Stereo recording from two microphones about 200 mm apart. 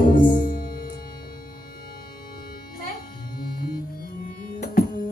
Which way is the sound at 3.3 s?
45° left (ahead or behind).